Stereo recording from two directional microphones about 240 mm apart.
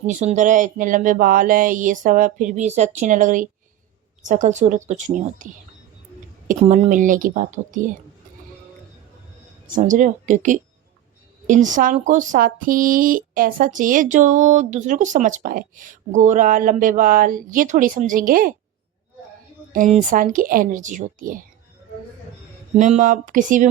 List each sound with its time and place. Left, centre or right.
0.1 s speech: right
6.5 s speech: right
9.7 s speech: right
19.7 s speech: right
22.7 s speech: right